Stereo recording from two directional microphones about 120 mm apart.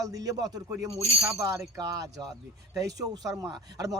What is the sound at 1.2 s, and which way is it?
Speech, 25° right (ahead or behind).